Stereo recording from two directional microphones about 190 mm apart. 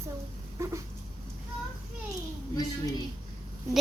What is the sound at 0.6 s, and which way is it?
Cat, 15° right (ahead or behind).